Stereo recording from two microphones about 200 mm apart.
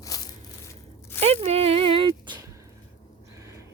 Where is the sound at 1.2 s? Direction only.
30° right (ahead or behind).